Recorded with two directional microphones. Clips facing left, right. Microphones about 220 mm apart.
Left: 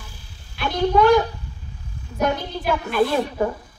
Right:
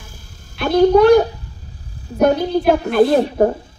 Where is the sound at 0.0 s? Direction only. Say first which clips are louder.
Right 3 dB; 45° right (ahead or behind).